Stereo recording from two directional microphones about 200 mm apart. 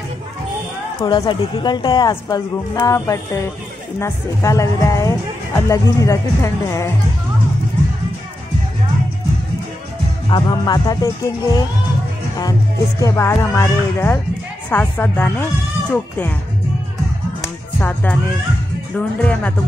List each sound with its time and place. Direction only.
1.0 s a woman's voice: 20° left (ahead or behind)
10.3 s speech: 20° left (ahead or behind)
13.0 s speech: 15° left (ahead or behind)
17.7 s speech: 5° left (ahead or behind)